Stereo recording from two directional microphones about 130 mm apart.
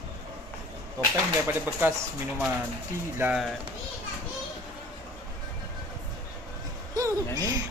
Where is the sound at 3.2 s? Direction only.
20° right (ahead or behind).